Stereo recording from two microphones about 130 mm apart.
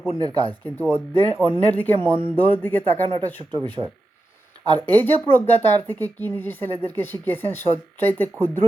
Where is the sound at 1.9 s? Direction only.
40° right (ahead or behind).